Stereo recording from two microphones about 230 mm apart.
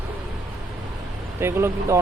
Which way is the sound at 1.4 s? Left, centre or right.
Centre.